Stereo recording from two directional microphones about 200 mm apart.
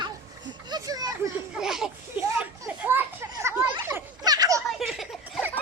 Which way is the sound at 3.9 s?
15° right (ahead or behind).